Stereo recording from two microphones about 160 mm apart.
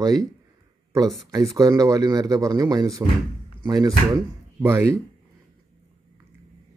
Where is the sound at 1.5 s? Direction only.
20° right (ahead or behind).